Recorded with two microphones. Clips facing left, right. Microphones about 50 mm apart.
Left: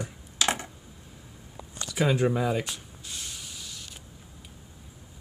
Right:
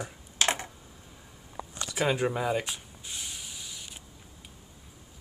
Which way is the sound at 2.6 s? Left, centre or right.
Centre.